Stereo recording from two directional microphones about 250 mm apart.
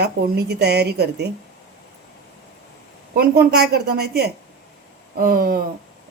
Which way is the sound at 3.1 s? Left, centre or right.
Right.